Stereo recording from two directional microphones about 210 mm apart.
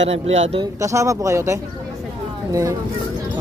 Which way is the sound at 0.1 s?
30° right (ahead or behind).